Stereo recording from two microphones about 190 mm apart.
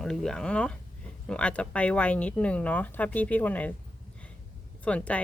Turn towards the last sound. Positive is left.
turn(degrees=5)  # may be behind; listen again after turning